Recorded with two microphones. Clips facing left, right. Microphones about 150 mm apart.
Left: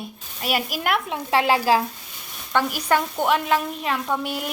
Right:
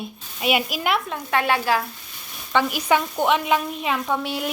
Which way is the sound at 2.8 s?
10° right (ahead or behind).